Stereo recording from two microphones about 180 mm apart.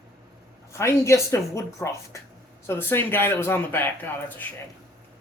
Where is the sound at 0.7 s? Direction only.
15° left (ahead or behind).